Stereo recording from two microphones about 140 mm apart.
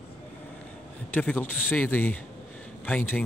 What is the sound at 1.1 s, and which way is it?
Speech, 10° left (ahead or behind).